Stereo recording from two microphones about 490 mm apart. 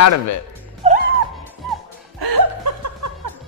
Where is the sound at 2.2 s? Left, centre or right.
Right.